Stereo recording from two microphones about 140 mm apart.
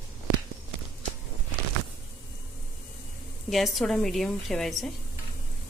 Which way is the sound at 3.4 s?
Centre (ahead or behind).